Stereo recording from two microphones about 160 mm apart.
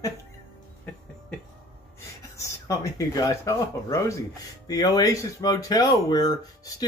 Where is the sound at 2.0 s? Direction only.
20° left (ahead or behind).